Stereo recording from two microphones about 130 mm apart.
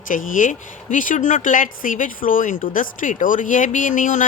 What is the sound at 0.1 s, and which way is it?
A woman's voice, 90° left.